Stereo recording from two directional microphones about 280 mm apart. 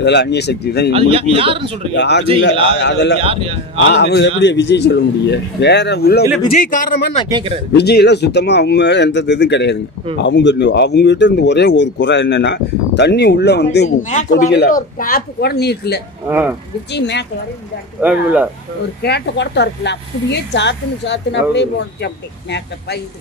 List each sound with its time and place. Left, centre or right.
0.0 s speech: left
1.1 s speech: centre
2.0 s speech: left
3.2 s speech: centre
3.9 s a man's voice: left
7.2 s speech: centre
7.7 s speech: left
16.3 s speech: centre
16.9 s speech: left
18.0 s speech: centre
19.0 s speech: left